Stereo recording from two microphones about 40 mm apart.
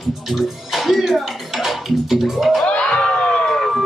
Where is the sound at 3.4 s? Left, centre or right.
Centre.